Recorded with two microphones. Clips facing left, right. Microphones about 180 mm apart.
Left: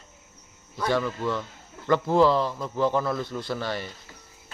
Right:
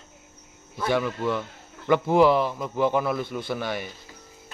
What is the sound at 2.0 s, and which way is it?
Speech, 20° right (ahead or behind).